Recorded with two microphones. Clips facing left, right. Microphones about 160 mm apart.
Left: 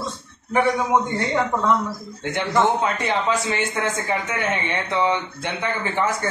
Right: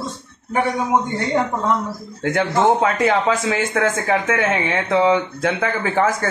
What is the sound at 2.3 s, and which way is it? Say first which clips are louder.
Speech: right 3 dB; 90° right.